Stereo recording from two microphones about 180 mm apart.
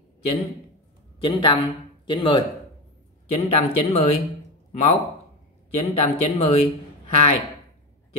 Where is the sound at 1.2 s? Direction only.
25° left (ahead or behind).